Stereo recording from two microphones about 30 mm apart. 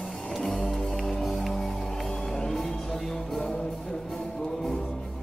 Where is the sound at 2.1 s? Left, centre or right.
Left.